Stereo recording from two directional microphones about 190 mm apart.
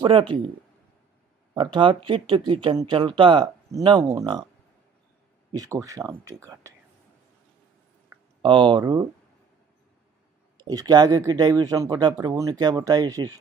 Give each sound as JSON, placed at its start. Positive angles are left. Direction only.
{"t": 0.0, "sound": "speech", "side_deg": -25}
{"t": 1.5, "sound": "speech", "side_deg": -25}
{"t": 5.5, "sound": "speech", "side_deg": -20}
{"t": 8.4, "sound": "speech", "side_deg": -25}
{"t": 10.6, "sound": "speech", "side_deg": -20}